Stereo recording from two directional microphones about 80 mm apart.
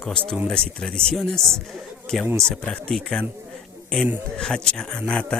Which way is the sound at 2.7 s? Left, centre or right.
Centre.